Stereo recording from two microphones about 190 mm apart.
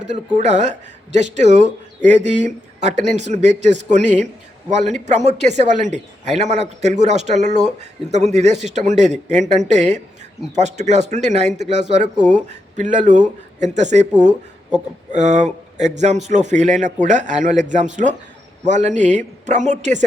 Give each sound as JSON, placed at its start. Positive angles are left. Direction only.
{"t": 0.3, "sound": "speech", "side_deg": -40}
{"t": 15.1, "sound": "speech", "side_deg": -40}